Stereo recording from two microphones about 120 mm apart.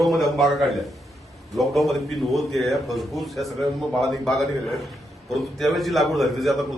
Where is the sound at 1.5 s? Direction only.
Centre (ahead or behind).